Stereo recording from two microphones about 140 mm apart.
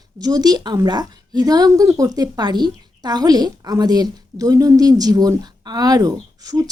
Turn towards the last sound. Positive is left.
turn(degrees=-25)  # may be behind; listen again after turning